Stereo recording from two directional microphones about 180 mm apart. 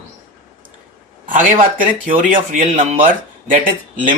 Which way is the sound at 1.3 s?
45° right (ahead or behind).